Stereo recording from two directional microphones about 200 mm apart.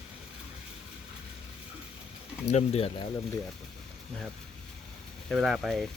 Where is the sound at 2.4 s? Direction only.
35° left (ahead or behind).